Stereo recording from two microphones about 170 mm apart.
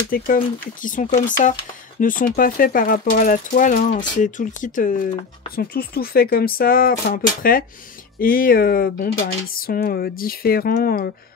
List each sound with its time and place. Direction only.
0.1 s speech: 55° left (ahead or behind)
5.6 s speech: 60° left (ahead or behind)